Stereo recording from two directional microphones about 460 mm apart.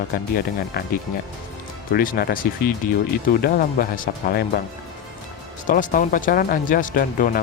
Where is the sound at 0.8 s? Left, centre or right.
Centre.